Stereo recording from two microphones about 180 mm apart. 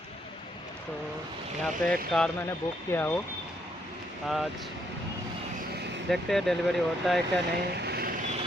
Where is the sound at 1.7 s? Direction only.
5° left (ahead or behind).